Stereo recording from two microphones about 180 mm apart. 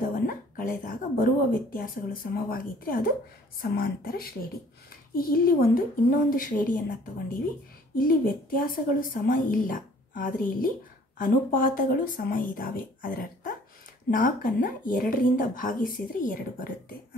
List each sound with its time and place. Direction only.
0.0 s a woman's voice: 50° left (ahead or behind)
8.0 s a woman's voice: 50° left (ahead or behind)